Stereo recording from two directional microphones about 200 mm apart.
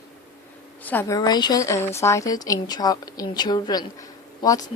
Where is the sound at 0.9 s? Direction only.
15° left (ahead or behind).